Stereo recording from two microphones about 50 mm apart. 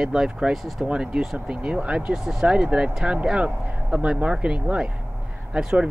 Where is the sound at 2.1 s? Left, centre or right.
Centre.